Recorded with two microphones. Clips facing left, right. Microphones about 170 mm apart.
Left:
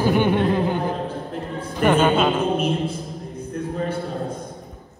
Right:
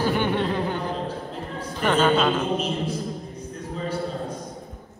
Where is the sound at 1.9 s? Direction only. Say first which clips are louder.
Left 2 dB; 15° left (ahead or behind).